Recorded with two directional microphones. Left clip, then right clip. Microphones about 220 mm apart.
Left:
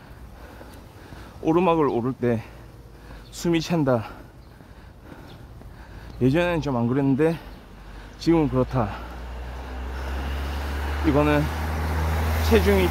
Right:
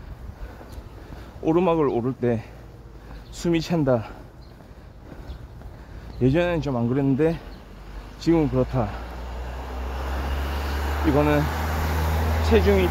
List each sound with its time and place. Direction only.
1.4 s speech: 15° left (ahead or behind)
6.2 s speech: 15° left (ahead or behind)
9.2 s vehicle: 30° right (ahead or behind)
11.1 s speech: 15° left (ahead or behind)
11.4 s vehicle: 20° right (ahead or behind)
12.3 s a sound: 15° left (ahead or behind)